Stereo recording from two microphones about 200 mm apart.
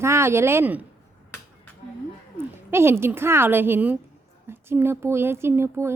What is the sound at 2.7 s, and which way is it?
Speech, 10° right (ahead or behind).